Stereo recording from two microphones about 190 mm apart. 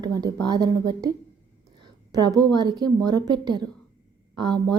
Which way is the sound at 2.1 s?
20° right (ahead or behind).